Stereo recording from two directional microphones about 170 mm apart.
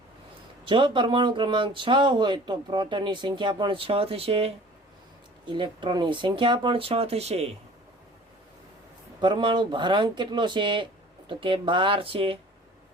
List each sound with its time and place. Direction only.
0.6 s speech: 30° right (ahead or behind)
9.2 s speech: 30° right (ahead or behind)